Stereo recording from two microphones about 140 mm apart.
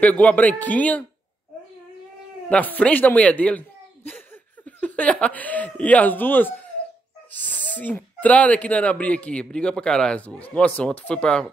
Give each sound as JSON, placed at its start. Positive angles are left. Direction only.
{"t": 0.0, "sound": "speech", "side_deg": 10}
{"t": 2.5, "sound": "speech", "side_deg": 10}